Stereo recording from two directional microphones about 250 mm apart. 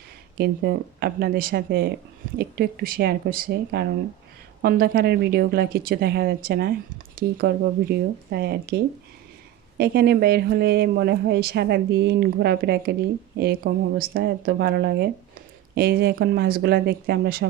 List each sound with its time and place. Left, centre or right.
0.3 s speech: right